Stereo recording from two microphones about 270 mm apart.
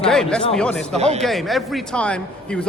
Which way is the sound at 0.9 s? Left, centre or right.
Right.